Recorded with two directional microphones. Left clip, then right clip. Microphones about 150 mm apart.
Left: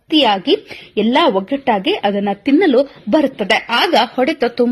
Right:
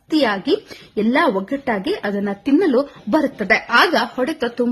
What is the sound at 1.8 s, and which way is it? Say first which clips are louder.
A woman's voice: left 6 dB; 15° left (ahead or behind).